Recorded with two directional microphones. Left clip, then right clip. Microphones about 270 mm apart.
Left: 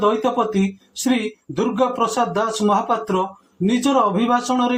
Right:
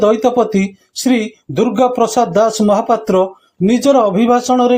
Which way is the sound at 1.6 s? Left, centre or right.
Right.